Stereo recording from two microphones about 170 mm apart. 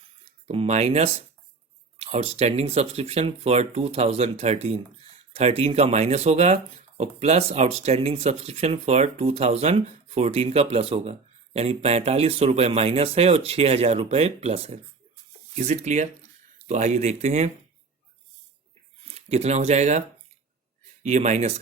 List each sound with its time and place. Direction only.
0.4 s speech: 35° right (ahead or behind)
19.0 s speech: 40° right (ahead or behind)
21.0 s speech: 40° right (ahead or behind)